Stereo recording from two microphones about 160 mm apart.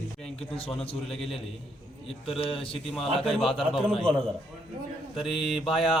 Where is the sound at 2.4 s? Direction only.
35° left (ahead or behind).